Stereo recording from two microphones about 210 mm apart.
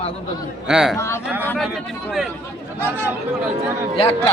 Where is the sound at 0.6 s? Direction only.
5° right (ahead or behind).